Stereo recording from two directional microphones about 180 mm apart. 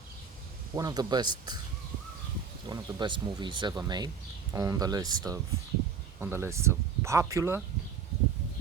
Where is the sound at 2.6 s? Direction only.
25° right (ahead or behind).